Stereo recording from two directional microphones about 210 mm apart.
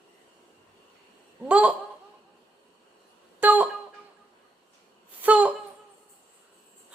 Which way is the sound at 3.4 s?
5° right (ahead or behind).